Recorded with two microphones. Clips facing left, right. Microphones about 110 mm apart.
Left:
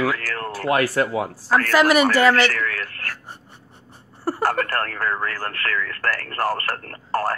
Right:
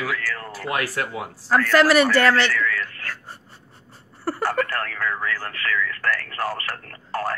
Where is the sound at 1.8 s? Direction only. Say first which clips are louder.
Even; 10° left (ahead or behind).